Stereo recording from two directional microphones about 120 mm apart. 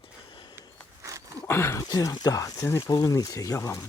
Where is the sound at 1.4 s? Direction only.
25° left (ahead or behind).